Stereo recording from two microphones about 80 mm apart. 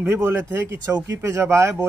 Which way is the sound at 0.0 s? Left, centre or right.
Right.